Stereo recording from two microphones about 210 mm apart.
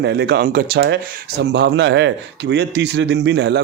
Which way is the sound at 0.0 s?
50° right (ahead or behind).